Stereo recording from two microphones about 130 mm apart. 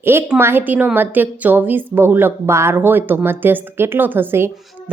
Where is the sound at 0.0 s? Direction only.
20° right (ahead or behind).